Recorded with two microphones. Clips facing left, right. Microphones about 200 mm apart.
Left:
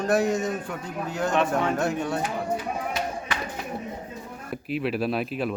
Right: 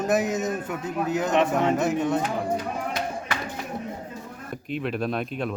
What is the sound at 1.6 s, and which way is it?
Speech, 20° right (ahead or behind).